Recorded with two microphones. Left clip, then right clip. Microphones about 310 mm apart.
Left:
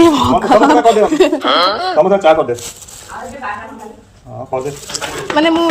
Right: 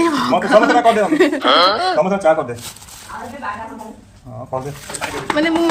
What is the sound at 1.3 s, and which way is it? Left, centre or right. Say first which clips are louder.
Speech: even; centre.